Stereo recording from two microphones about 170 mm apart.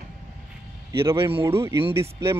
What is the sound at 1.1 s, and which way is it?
Speech, 30° right (ahead or behind).